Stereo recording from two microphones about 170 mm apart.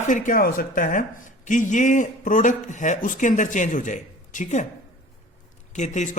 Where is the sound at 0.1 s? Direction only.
50° left (ahead or behind).